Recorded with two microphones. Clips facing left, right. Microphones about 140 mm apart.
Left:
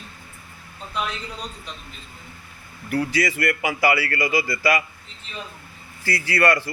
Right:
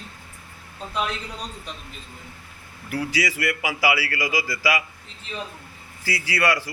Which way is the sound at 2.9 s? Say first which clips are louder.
Left 3 dB; 10° right (ahead or behind).